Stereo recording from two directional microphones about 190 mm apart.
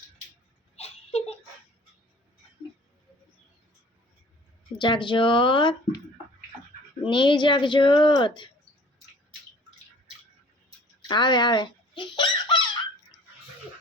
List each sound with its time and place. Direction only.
0.8 s a sound: 35° left (ahead or behind)
4.8 s speech: 25° left (ahead or behind)
7.1 s speech: 25° left (ahead or behind)
11.1 s fowl: 25° left (ahead or behind)